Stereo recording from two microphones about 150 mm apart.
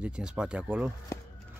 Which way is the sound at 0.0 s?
5° right (ahead or behind).